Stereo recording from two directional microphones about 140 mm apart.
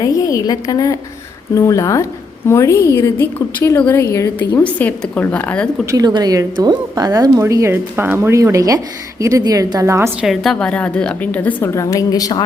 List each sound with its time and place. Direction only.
0.0 s a sound: 25° left (ahead or behind)
1.5 s a woman's voice: 25° left (ahead or behind)
5.8 s a woman's voice: 25° right (ahead or behind)
10.2 s a woman's voice: centre (ahead or behind); by 12.4 s 25° left (ahead or behind)